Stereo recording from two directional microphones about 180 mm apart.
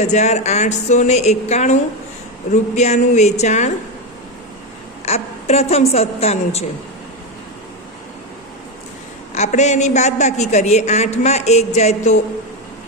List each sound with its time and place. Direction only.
0.0 s a woman's voice: 40° left (ahead or behind)
5.0 s a woman's voice: 35° left (ahead or behind)
9.3 s a woman's voice: 40° left (ahead or behind)